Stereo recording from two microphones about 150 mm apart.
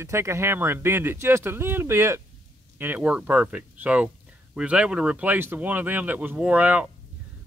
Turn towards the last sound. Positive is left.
turn(degrees=-10)  # may be behind; listen again after turning